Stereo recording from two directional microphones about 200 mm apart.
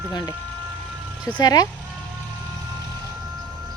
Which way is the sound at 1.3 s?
20° left (ahead or behind).